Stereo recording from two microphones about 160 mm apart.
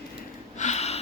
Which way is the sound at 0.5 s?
45° left (ahead or behind).